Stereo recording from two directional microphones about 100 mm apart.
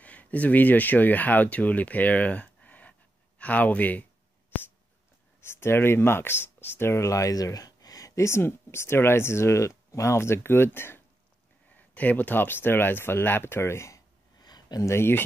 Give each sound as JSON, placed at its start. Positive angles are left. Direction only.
{"t": 0.0, "sound": "speech", "side_deg": 15}
{"t": 5.4, "sound": "speech", "side_deg": 25}
{"t": 14.4, "sound": "a sound", "side_deg": 40}
{"t": 14.9, "sound": "speech", "side_deg": 25}